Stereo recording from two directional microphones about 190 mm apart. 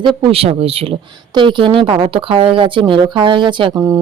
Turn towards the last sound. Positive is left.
turn(degrees=-25)  # may be behind; listen again after turning